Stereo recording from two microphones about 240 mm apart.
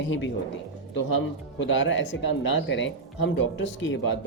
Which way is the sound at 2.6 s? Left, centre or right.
Left.